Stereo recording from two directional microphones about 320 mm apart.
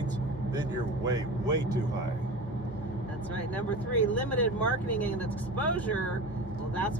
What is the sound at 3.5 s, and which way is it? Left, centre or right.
Speech, centre.